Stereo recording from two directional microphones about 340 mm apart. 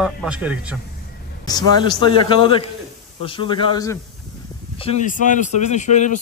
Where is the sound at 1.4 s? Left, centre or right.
Centre.